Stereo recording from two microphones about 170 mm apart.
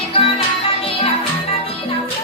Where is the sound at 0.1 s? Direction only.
35° left (ahead or behind).